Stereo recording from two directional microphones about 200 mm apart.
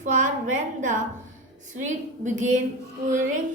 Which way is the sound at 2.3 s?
40° right (ahead or behind).